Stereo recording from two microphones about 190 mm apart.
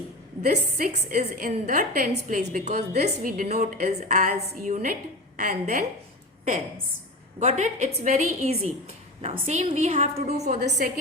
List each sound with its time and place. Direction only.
0.4 s a woman's voice: 40° right (ahead or behind)
7.3 s a woman's voice: 40° right (ahead or behind)